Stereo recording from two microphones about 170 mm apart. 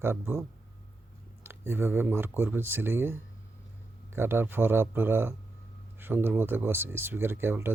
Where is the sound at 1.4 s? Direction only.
15° right (ahead or behind).